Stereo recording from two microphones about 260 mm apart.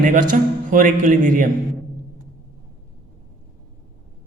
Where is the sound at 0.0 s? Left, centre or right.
Right.